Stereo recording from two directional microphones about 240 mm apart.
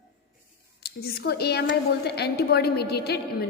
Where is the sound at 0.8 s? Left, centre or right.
Left.